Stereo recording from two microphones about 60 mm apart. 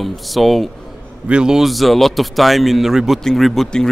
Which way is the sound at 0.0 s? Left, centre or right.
Centre.